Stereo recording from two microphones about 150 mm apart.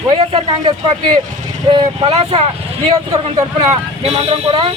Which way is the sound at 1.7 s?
30° right (ahead or behind).